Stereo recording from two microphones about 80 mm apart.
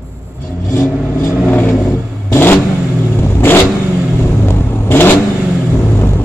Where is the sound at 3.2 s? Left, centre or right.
Left.